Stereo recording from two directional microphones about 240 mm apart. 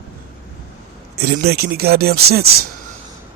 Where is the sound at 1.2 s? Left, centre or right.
Right.